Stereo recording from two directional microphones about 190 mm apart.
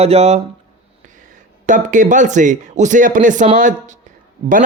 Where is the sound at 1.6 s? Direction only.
40° right (ahead or behind).